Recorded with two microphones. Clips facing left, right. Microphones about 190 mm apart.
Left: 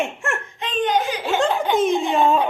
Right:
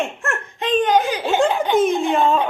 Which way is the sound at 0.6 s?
45° right (ahead or behind).